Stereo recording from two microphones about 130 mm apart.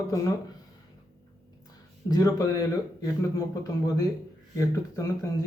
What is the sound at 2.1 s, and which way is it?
Speech, 25° left (ahead or behind).